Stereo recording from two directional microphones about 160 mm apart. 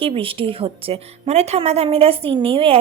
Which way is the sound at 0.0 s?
35° right (ahead or behind).